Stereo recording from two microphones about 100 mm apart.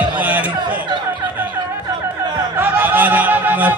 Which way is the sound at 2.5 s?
20° right (ahead or behind).